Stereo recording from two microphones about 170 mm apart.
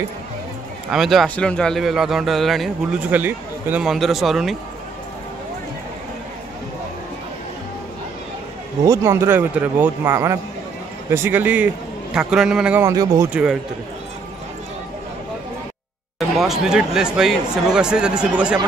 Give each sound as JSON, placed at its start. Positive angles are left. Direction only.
{"t": 0.9, "sound": "a man's voice", "side_deg": 0}
{"t": 3.2, "sound": "a man's voice", "side_deg": -10}
{"t": 8.8, "sound": "a man's voice", "side_deg": -20}
{"t": 12.8, "sound": "speech", "side_deg": -20}
{"t": 13.3, "sound": "a man's voice", "side_deg": -5}
{"t": 16.3, "sound": "a man's voice", "side_deg": -5}